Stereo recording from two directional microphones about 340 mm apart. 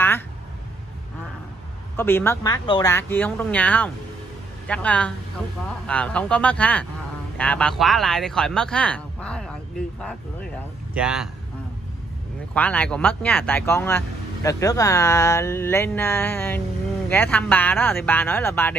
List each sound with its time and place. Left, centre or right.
2.0 s speech: centre
11.0 s speech: centre
12.5 s speech: centre